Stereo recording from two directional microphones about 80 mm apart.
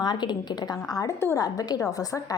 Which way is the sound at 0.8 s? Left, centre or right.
Left.